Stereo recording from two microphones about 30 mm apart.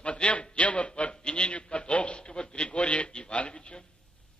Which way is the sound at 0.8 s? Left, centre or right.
Left.